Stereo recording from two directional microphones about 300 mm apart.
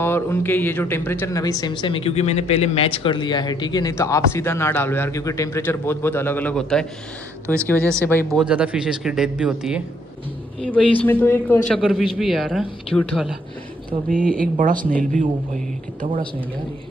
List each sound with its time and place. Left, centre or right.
0.0 s a man's voice: centre
13.8 s speech: right